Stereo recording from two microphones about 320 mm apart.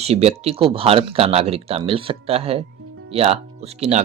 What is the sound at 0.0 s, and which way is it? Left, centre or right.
Speech, centre.